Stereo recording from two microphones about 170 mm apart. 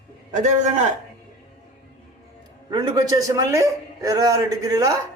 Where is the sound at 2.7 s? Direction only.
25° right (ahead or behind).